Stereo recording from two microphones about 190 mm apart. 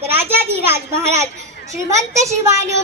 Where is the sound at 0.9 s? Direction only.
35° right (ahead or behind).